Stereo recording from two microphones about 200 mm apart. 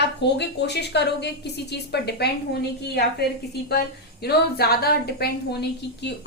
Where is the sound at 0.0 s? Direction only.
60° left (ahead or behind).